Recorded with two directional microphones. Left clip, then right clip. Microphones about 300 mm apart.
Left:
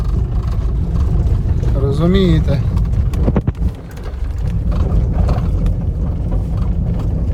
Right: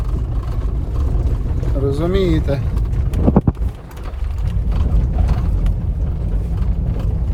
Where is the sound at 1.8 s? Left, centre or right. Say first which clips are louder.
Left 2 dB; centre.